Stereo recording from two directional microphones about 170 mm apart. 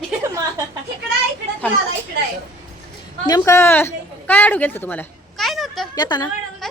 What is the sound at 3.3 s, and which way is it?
A man's voice, 20° left (ahead or behind).